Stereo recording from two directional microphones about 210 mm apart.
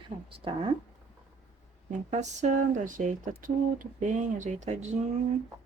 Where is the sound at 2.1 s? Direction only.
35° right (ahead or behind).